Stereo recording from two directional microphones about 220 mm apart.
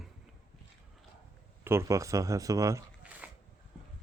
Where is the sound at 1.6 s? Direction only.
10° right (ahead or behind).